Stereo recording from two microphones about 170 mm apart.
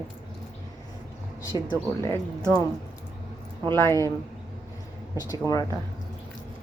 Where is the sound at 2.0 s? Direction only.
15° left (ahead or behind).